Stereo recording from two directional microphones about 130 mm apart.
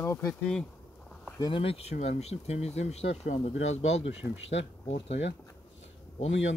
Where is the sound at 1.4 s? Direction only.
40° left (ahead or behind).